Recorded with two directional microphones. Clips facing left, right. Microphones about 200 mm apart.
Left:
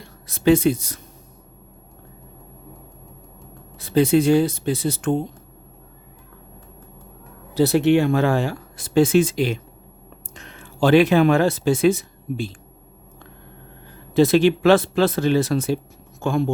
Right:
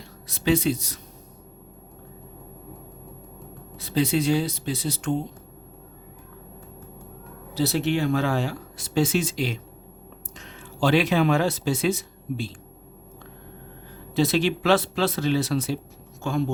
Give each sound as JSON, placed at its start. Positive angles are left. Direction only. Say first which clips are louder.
{"t": 0.0, "sound": "speech", "louder": "left 8 dB", "side_deg": 50}
{"t": 3.8, "sound": "speech", "louder": "left 7 dB", "side_deg": 50}
{"t": 7.5, "sound": "speech", "louder": "left 8 dB", "side_deg": 55}
{"t": 14.1, "sound": "speech", "louder": "left 7 dB", "side_deg": 55}